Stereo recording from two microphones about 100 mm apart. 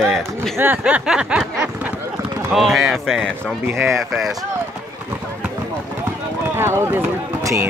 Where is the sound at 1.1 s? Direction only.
10° right (ahead or behind).